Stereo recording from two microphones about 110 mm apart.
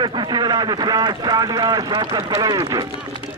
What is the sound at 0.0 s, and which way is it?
A man's voice, 45° right (ahead or behind).